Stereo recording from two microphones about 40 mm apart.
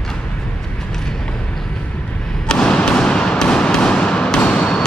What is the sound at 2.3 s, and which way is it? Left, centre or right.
Thump, centre.